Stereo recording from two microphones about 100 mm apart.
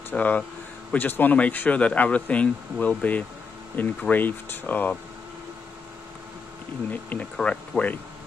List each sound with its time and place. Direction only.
0.1 s speech: 15° left (ahead or behind)
6.9 s speech: 15° left (ahead or behind)